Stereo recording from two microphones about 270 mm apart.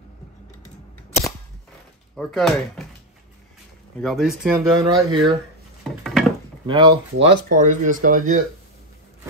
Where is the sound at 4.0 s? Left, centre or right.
Centre.